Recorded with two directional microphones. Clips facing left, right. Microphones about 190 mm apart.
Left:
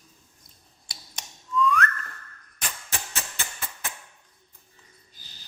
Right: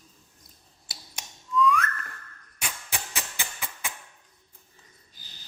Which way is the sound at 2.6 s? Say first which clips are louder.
Even; 10° right (ahead or behind).